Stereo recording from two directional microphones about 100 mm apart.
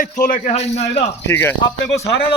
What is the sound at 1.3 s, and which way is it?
Speech, 20° left (ahead or behind).